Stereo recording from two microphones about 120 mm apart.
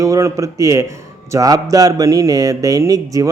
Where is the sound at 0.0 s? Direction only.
25° right (ahead or behind).